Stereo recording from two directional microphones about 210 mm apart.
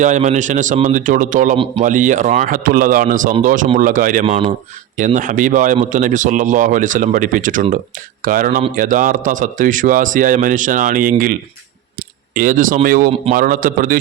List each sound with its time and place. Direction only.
0.0 s speech: 35° right (ahead or behind)